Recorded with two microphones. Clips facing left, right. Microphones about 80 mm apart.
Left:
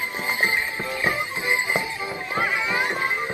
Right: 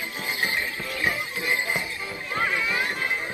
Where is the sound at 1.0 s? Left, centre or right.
Left.